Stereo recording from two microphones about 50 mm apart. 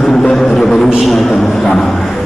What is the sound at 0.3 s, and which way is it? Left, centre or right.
Music, centre.